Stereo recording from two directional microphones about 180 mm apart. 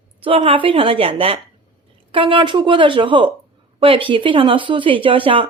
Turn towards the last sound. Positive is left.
turn(degrees=-30)  # may be behind; listen again after turning